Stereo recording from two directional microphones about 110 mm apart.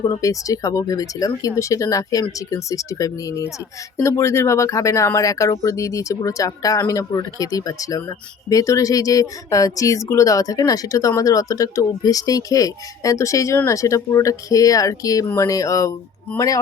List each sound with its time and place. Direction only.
0.1 s speech: 30° left (ahead or behind)